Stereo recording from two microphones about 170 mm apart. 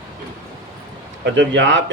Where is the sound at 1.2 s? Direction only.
90° right.